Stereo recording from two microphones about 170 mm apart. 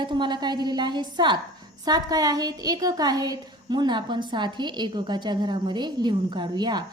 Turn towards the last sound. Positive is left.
turn(degrees=-25)  # may be behind; listen again after turning